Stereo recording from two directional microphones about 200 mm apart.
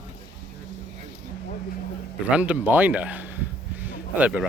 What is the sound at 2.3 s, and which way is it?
Speech, 5° right (ahead or behind).